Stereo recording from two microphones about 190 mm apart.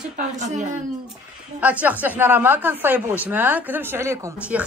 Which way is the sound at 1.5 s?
10° right (ahead or behind).